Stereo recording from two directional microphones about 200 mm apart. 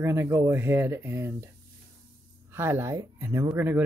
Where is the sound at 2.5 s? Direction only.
10° right (ahead or behind).